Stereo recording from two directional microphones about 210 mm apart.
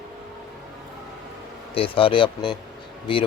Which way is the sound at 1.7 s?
25° left (ahead or behind).